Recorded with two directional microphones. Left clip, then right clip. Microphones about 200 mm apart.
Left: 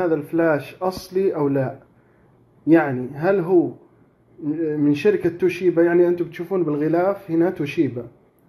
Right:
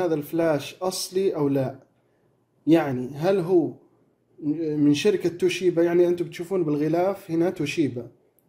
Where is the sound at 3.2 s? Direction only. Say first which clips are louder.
Left 3 dB; 10° right (ahead or behind).